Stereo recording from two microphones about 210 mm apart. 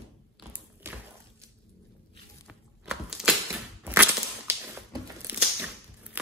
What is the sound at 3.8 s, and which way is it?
Crushing, 10° right (ahead or behind).